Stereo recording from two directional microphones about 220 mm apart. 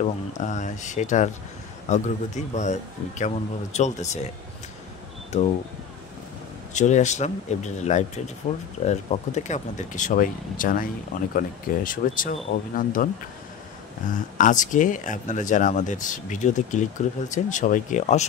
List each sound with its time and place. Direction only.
0.0 s speech: 35° left (ahead or behind)
6.7 s speech: 35° left (ahead or behind)
14.1 s speech: 35° left (ahead or behind)